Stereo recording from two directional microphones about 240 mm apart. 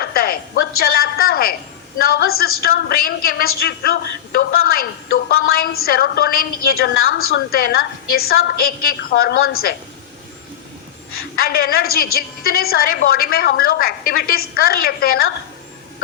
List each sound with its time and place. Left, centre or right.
0.0 s a sound: left
0.8 s a woman's voice: left
11.3 s a woman's voice: left